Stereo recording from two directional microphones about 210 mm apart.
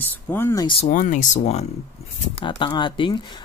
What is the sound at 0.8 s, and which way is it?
Speech, 40° left (ahead or behind).